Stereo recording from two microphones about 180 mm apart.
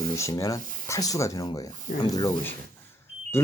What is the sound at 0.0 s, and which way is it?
Speech, 15° left (ahead or behind).